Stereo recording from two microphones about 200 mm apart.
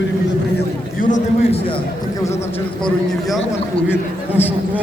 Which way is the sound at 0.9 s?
40° left (ahead or behind).